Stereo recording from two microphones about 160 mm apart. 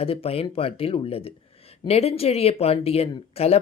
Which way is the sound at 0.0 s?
35° left (ahead or behind).